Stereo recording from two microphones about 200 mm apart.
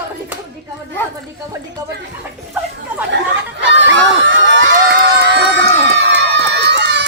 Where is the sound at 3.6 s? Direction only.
65° right (ahead or behind).